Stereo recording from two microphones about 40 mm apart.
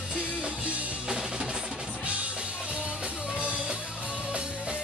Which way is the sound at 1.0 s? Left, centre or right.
Right.